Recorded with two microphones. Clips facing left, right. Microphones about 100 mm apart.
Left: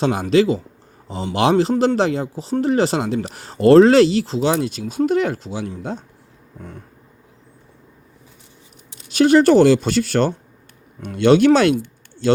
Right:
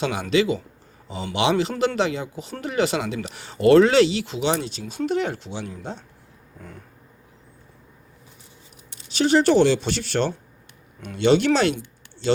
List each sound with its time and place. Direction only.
0.0 s speech: 40° left (ahead or behind)
9.1 s speech: 50° left (ahead or behind)